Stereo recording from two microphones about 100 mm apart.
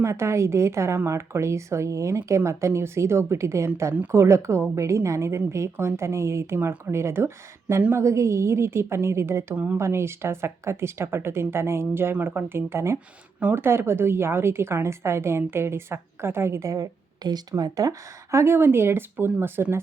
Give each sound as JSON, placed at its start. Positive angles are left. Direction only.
{"t": 0.0, "sound": "a woman's voice", "side_deg": -30}